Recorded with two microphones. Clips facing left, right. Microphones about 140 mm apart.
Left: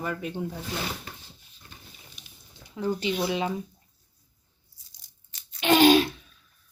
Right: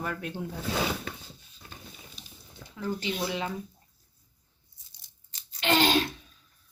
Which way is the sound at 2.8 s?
20° left (ahead or behind).